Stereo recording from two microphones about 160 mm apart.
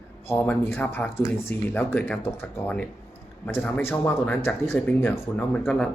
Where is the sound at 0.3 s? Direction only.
15° left (ahead or behind).